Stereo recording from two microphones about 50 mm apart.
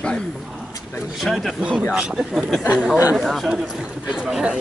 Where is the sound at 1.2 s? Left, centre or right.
Centre.